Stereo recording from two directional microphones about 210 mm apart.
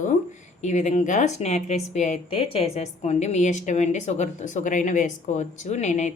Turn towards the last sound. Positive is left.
turn(degrees=35)  # may be behind; listen again after turning